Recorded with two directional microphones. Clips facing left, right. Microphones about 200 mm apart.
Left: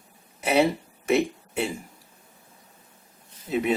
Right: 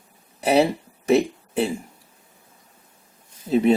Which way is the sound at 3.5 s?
30° right (ahead or behind).